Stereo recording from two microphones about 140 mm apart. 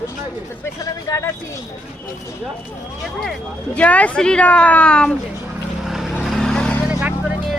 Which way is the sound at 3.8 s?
10° left (ahead or behind).